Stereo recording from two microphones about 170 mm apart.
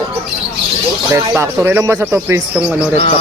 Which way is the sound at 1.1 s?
15° right (ahead or behind).